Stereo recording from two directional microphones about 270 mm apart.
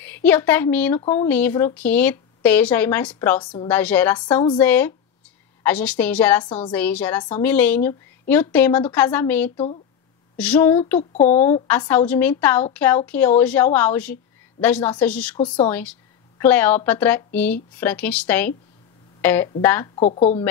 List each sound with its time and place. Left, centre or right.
0.0 s a woman's voice: centre
20.0 s a woman's voice: left